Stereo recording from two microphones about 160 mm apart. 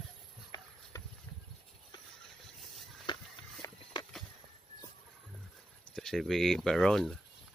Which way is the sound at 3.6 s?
20° left (ahead or behind).